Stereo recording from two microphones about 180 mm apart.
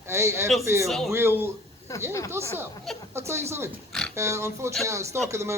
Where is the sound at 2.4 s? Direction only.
15° right (ahead or behind).